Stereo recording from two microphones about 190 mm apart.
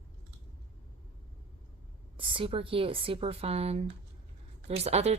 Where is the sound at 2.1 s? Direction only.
25° right (ahead or behind).